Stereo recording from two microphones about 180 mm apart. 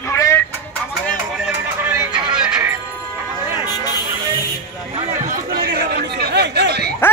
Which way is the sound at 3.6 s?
20° left (ahead or behind).